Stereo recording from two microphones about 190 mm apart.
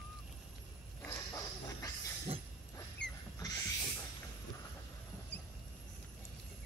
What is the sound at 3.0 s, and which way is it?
Rodents, 65° left (ahead or behind).